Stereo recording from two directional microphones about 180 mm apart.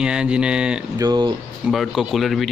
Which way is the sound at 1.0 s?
20° right (ahead or behind).